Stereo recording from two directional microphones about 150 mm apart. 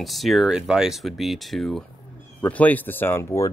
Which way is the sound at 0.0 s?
Centre (ahead or behind).